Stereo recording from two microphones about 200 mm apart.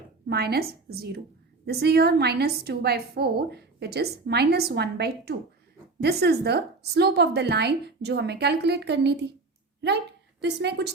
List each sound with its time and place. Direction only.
0.3 s a woman's voice: 55° right (ahead or behind)